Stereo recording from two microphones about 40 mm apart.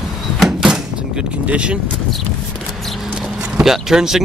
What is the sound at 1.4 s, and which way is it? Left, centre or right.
Speech, right.